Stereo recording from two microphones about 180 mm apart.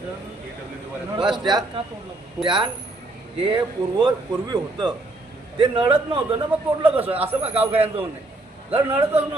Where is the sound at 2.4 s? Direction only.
25° right (ahead or behind).